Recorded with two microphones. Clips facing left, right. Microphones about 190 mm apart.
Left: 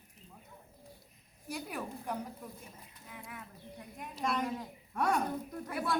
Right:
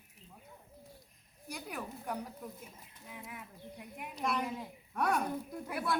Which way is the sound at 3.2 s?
15° right (ahead or behind).